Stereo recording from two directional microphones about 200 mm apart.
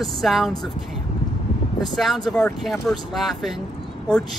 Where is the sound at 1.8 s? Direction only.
Centre (ahead or behind).